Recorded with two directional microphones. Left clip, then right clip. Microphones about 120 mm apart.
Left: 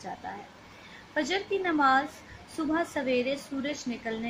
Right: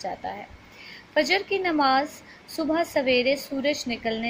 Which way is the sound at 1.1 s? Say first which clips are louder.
Right 6 dB; 35° right (ahead or behind).